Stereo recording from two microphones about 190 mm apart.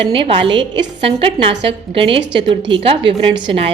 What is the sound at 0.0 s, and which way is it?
A woman's voice, 30° right (ahead or behind).